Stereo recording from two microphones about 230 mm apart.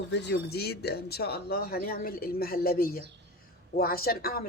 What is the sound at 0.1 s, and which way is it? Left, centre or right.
A woman's voice, left.